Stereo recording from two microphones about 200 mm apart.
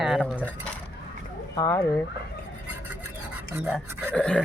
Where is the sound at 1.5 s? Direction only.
15° left (ahead or behind).